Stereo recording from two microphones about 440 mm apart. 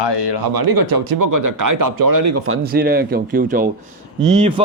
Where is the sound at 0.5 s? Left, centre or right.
Right.